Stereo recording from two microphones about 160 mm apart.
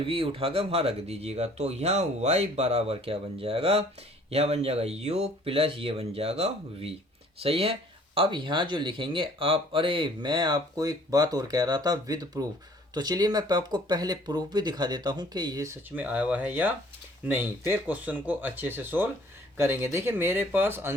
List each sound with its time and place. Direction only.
0.0 s speech: 35° right (ahead or behind); by 20.9 s 15° right (ahead or behind)